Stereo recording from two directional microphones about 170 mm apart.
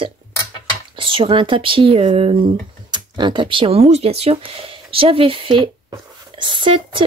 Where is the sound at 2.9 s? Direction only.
25° right (ahead or behind).